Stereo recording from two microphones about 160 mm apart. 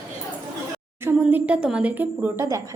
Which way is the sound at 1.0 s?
10° right (ahead or behind).